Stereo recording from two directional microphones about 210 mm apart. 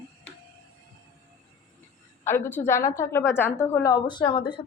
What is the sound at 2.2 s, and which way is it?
A woman's voice, 10° left (ahead or behind).